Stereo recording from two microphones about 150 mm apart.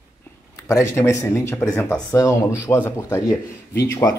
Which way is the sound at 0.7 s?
15° left (ahead or behind).